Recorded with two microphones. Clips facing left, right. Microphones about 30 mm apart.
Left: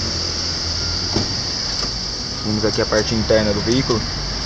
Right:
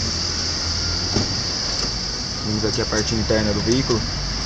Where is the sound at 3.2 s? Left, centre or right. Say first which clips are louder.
Left 4 dB; centre.